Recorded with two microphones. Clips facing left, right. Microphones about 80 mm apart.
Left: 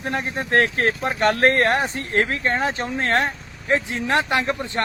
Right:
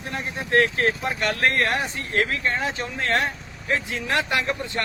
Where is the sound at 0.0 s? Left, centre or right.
Left.